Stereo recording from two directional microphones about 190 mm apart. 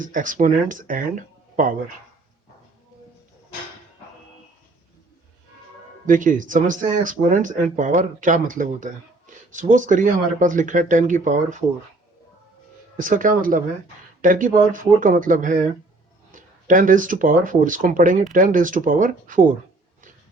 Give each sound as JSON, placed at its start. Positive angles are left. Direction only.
{"t": 0.0, "sound": "speech", "side_deg": -45}
{"t": 6.1, "sound": "speech", "side_deg": -45}
{"t": 13.0, "sound": "speech", "side_deg": -45}